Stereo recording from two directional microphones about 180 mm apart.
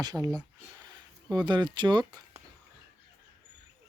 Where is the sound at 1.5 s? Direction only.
25° right (ahead or behind).